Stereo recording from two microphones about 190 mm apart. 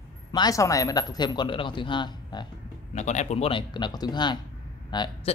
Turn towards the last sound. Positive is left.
turn(degrees=20)  # may be behind; listen again after turning